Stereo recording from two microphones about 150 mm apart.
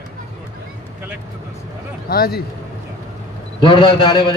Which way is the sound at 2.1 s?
90° left.